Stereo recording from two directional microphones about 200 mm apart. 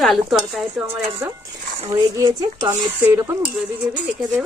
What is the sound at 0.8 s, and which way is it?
A woman's voice, 15° right (ahead or behind).